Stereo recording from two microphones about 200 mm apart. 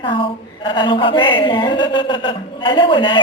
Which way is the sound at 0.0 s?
25° left (ahead or behind).